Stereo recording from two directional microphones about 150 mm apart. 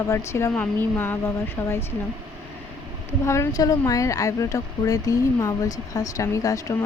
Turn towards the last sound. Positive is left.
turn(degrees=20)  # may be behind; listen again after turning